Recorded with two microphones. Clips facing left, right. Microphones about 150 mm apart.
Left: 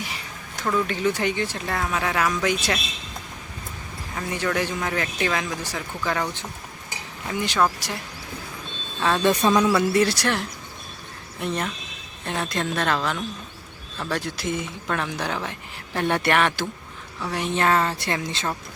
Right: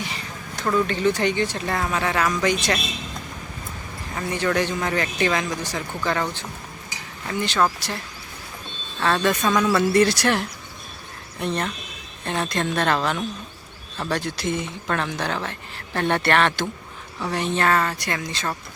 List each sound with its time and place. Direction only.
0.6 s speech: 5° left (ahead or behind)
4.1 s speech: centre (ahead or behind)
7.3 s speech: 10° left (ahead or behind)
9.0 s speech: 10° left (ahead or behind)
9.4 s speech: 25° left (ahead or behind)
9.6 s speech: 5° left (ahead or behind)
14.1 s speech: 5° left (ahead or behind)
17.5 s speech: 15° left (ahead or behind)